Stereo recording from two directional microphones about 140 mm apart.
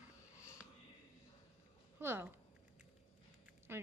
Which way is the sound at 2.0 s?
15° right (ahead or behind).